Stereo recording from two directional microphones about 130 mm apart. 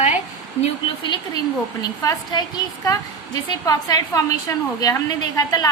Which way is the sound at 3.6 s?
30° left (ahead or behind).